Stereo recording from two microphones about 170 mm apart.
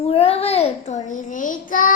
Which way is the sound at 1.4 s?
50° left (ahead or behind).